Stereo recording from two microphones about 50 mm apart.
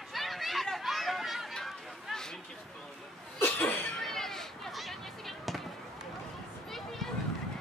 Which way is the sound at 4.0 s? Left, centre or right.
Centre.